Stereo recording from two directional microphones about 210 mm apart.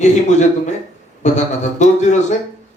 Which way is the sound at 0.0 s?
35° left (ahead or behind).